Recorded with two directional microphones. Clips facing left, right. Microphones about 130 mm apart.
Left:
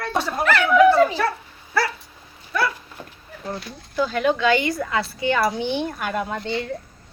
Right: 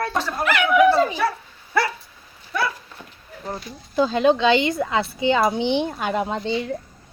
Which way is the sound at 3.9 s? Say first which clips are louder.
Right 3 dB; 25° right (ahead or behind).